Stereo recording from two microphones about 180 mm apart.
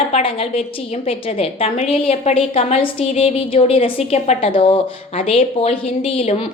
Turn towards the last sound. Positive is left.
turn(degrees=30)  # may be behind; listen again after turning